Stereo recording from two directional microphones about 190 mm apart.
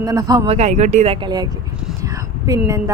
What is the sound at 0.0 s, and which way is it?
Speech, 20° right (ahead or behind).